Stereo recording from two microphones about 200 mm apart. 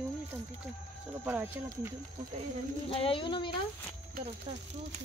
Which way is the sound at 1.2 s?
10° right (ahead or behind).